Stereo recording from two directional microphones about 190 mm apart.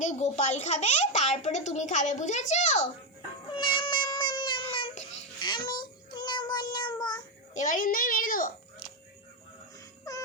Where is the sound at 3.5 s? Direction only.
25° left (ahead or behind).